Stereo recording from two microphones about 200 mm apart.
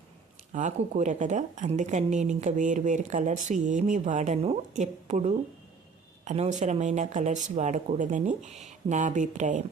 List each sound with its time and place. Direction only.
0.5 s a woman's voice: 35° right (ahead or behind)